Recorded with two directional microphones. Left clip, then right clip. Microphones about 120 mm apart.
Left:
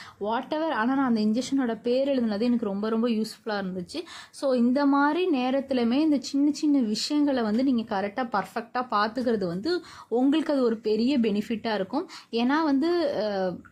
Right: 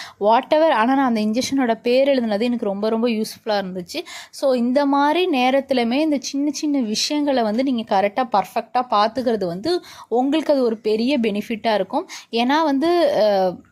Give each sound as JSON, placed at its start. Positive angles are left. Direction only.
{"t": 0.2, "sound": "speech", "side_deg": -50}